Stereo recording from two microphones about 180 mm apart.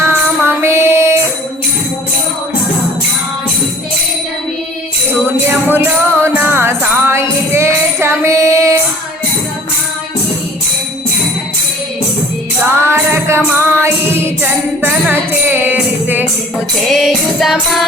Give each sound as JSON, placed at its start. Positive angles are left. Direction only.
{"t": 0.0, "sound": "music", "side_deg": -15}
{"t": 5.5, "sound": "music", "side_deg": -10}
{"t": 12.9, "sound": "music", "side_deg": -15}